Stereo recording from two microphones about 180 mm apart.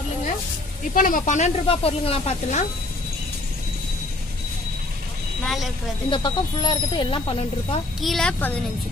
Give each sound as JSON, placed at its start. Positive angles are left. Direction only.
{"t": 0.9, "sound": "speech", "side_deg": 50}
{"t": 5.4, "sound": "a sound", "side_deg": 0}
{"t": 6.0, "sound": "speech", "side_deg": 25}
{"t": 8.0, "sound": "speech", "side_deg": 0}